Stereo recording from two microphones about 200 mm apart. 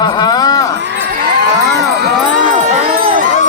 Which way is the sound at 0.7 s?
60° right (ahead or behind).